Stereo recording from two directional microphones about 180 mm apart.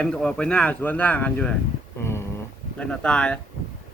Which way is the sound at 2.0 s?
15° left (ahead or behind).